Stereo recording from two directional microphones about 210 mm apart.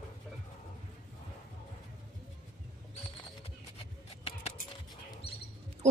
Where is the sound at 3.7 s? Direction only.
30° left (ahead or behind).